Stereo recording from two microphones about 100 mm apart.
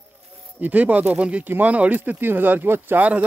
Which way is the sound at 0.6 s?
15° right (ahead or behind).